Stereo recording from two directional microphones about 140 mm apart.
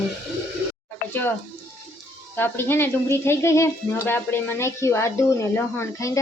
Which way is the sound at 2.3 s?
15° left (ahead or behind).